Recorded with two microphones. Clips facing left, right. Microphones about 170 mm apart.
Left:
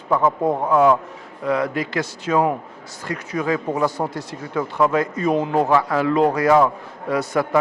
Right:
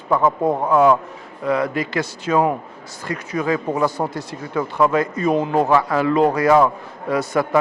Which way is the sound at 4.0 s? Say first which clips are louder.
Right 1 dB; 30° right (ahead or behind).